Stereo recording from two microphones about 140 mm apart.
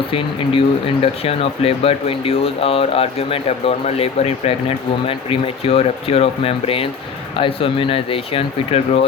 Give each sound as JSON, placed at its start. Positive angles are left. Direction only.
{"t": 0.1, "sound": "speech", "side_deg": 40}